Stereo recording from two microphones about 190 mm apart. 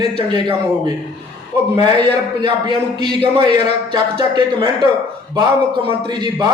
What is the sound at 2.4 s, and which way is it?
A man's voice, 25° right (ahead or behind).